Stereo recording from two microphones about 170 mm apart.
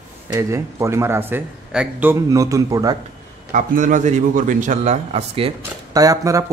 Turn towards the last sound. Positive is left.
turn(degrees=-20)  # may be behind; listen again after turning